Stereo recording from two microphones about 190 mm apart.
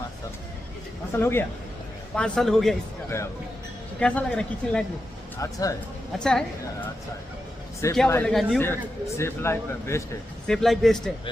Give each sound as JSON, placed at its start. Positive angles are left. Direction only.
{"t": 1.1, "sound": "speech", "side_deg": 15}
{"t": 4.0, "sound": "speech", "side_deg": 5}
{"t": 5.4, "sound": "speech", "side_deg": 15}
{"t": 6.1, "sound": "speech", "side_deg": 5}
{"t": 8.1, "sound": "speech", "side_deg": 5}
{"t": 8.6, "sound": "speech", "side_deg": 15}
{"t": 10.4, "sound": "speech", "side_deg": 0}